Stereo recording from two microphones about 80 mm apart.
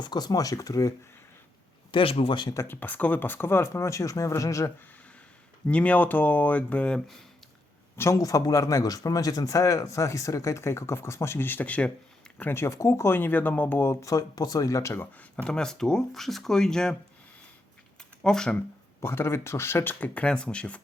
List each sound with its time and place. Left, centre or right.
0.0 s a man's voice: left
1.9 s speech: left
2.6 s speech: left
5.6 s speech: centre
7.9 s a man's voice: left; by 11.9 s centre
12.4 s speech: left
14.0 s a man's voice: left
15.4 s speech: centre
18.2 s speech: centre
18.9 s speech: left; by 20.8 s centre